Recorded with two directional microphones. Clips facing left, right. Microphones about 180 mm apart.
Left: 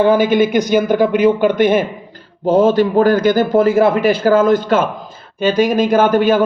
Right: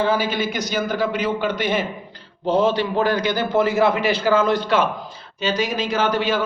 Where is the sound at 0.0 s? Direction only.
55° left (ahead or behind).